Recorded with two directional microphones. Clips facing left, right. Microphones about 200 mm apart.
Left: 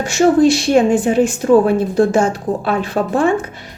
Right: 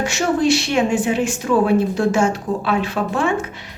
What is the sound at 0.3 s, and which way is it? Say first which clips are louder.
Speech: left 3 dB; 50° left (ahead or behind).